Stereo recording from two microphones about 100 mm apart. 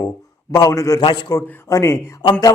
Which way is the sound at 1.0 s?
55° left (ahead or behind).